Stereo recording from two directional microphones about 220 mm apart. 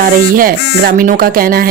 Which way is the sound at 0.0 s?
40° right (ahead or behind).